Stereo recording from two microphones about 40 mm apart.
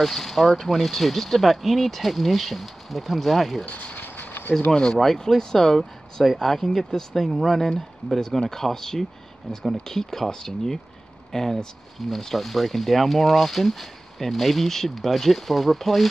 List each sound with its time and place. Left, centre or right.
0.0 s speech: centre
3.6 s speech: left
3.9 s a sound: left
4.5 s speech: left
4.9 s speech: centre